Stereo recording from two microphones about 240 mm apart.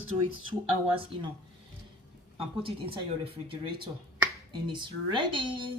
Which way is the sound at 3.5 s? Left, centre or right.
Right.